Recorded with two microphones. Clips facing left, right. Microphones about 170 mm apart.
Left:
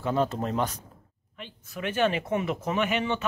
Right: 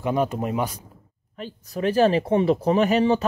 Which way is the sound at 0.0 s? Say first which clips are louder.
Right 3 dB; 15° right (ahead or behind).